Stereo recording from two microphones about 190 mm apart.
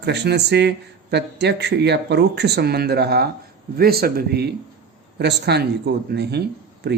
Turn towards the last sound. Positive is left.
turn(degrees=-60)  # may be behind; listen again after turning